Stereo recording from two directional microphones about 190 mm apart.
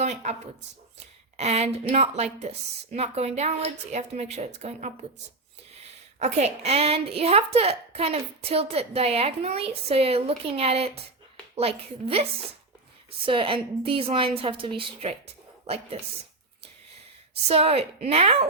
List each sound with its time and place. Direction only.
0.0 s a woman's voice: 35° right (ahead or behind)
17.5 s a woman's voice: 30° right (ahead or behind)